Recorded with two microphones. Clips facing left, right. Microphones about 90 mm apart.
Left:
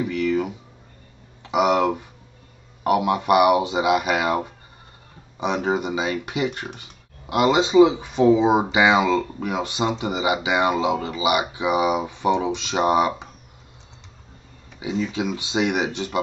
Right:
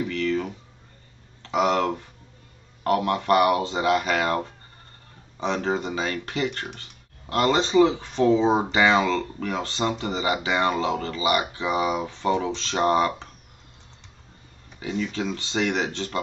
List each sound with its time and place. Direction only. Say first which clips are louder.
0.0 s a sound: left 3 dB; 15° left (ahead or behind)
1.4 s speech: left 3 dB; 15° left (ahead or behind)
14.8 s speech: left 3 dB; 15° left (ahead or behind)